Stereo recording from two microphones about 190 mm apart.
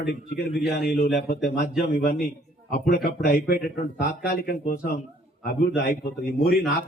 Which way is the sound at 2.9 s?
50° left (ahead or behind).